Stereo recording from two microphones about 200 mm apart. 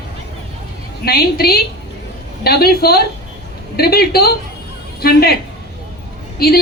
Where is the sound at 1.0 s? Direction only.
50° left (ahead or behind).